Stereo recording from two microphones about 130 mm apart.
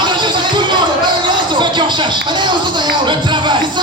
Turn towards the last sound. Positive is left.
turn(degrees=-35)  # may be behind; listen again after turning